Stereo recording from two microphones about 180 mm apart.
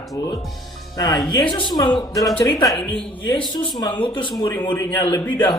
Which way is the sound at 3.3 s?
25° left (ahead or behind).